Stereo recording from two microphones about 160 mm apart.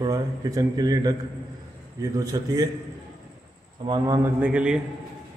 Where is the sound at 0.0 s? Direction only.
25° right (ahead or behind).